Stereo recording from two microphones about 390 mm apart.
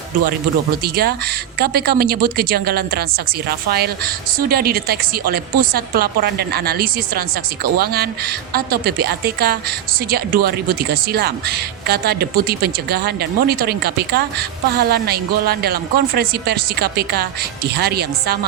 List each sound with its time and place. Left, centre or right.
0.8 s speech: right